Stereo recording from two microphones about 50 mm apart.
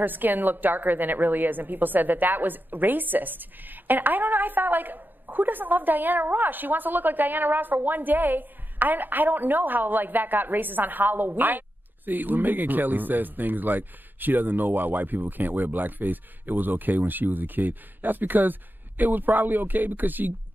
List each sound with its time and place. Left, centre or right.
0.0 s a woman's voice: right